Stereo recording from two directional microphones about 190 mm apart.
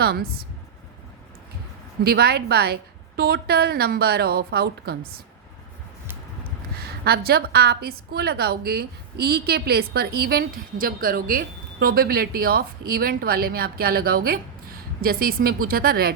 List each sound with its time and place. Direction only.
0.0 s a woman's voice: 55° right (ahead or behind)
2.0 s a woman's voice: 55° right (ahead or behind)
6.7 s a woman's voice: 55° right (ahead or behind)